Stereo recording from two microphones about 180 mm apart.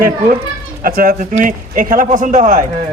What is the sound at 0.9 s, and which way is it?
Speech, 55° right (ahead or behind).